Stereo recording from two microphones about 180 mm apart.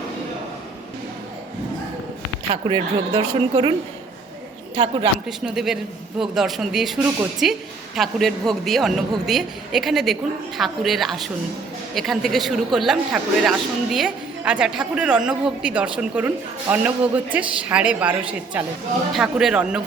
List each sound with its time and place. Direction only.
2.5 s a woman's voice: 25° right (ahead or behind)
5.5 s a man's voice: centre (ahead or behind)